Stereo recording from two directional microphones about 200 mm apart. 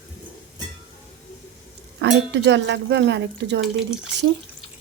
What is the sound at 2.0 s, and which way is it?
Speech, 65° right (ahead or behind).